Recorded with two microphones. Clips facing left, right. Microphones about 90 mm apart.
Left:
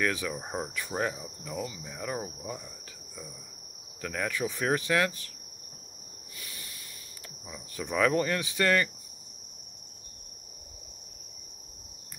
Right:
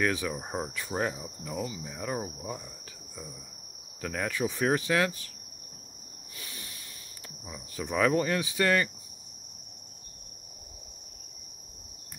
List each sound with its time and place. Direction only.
0.0 s speech: 15° right (ahead or behind)
0.4 s cricket: 5° right (ahead or behind)
0.7 s speech: 15° right (ahead or behind)
4.0 s speech: 15° right (ahead or behind)
6.4 s a sound: 30° right (ahead or behind)
7.4 s speech: 15° right (ahead or behind)